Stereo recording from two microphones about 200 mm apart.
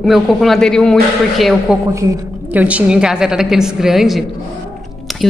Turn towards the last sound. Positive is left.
turn(degrees=0)  # may be behind; listen again after turning